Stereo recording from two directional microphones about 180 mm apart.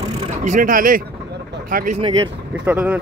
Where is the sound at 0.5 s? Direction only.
50° right (ahead or behind).